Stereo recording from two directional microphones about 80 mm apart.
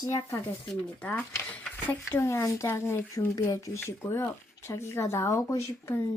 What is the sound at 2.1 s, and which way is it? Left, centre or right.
Speech, left.